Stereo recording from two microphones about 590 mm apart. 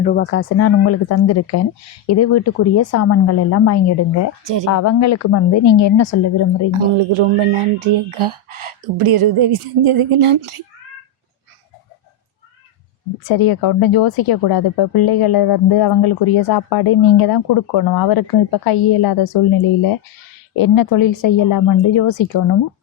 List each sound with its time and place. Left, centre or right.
0.0 s a woman's voice: centre
6.7 s speech: right
13.2 s speech: left